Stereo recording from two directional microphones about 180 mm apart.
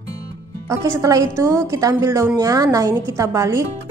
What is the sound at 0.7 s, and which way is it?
Speech, 15° right (ahead or behind).